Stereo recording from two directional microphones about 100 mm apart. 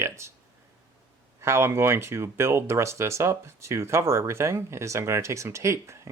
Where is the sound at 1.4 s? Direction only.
25° right (ahead or behind).